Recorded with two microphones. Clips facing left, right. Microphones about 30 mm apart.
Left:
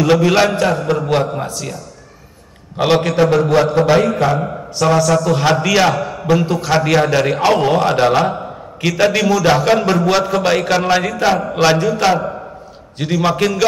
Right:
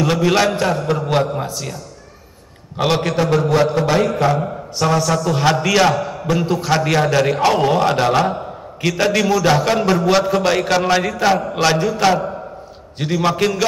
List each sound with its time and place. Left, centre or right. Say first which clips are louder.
0.0 s a man's voice: left 3 dB; centre
2.8 s a man's voice: left 3 dB; centre
3.2 s mantra: left 2 dB; centre
5.0 s a man's voice: left 2 dB; centre